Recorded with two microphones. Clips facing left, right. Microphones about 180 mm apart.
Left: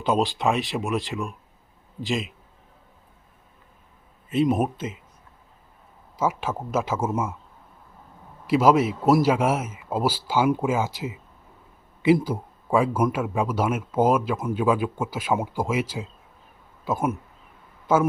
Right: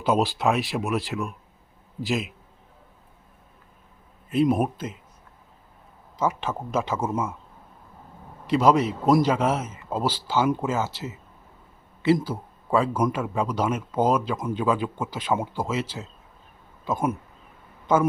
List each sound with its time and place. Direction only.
0.0 s speech: 5° right (ahead or behind)
4.3 s speech: centre (ahead or behind)
6.1 s speech: 10° left (ahead or behind)
8.4 s speech: 5° left (ahead or behind)